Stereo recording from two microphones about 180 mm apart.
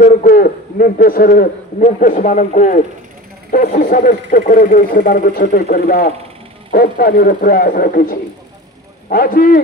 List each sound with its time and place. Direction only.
0.0 s a man's voice: 50° left (ahead or behind)